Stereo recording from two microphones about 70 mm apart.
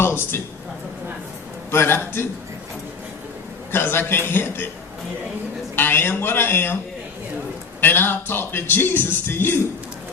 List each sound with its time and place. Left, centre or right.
0.0 s a man's voice: left
1.7 s speech: left
3.7 s speech: left
5.7 s speech: left
7.8 s speech: left